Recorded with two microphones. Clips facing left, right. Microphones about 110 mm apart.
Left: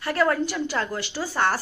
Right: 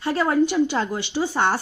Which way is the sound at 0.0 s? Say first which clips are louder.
Right 3 dB; 20° right (ahead or behind).